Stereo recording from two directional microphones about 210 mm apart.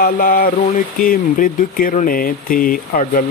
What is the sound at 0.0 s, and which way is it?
Speech, 45° left (ahead or behind).